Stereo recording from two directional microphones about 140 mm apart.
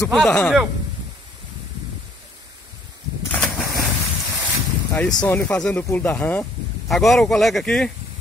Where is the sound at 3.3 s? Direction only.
Centre (ahead or behind).